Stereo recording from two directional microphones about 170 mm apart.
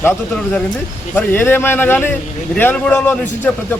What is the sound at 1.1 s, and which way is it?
A man's voice, 10° left (ahead or behind).